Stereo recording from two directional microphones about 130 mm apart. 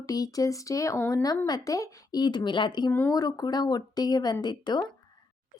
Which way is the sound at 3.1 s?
30° left (ahead or behind).